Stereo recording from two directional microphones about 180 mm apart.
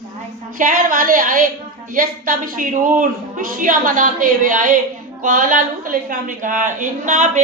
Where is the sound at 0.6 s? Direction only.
45° right (ahead or behind).